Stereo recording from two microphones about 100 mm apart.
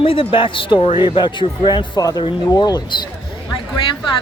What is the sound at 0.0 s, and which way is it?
Speech, 65° left (ahead or behind).